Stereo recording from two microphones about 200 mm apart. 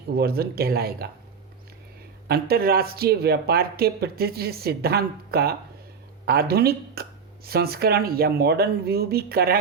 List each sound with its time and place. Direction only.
0.2 s speech: 50° right (ahead or behind)
2.2 s speech: 50° right (ahead or behind)